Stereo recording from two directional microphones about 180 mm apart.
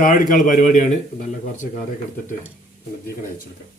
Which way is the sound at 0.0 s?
50° left (ahead or behind).